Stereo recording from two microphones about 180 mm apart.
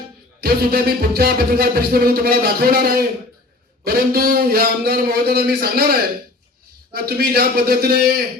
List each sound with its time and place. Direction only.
0.4 s music: 60° right (ahead or behind)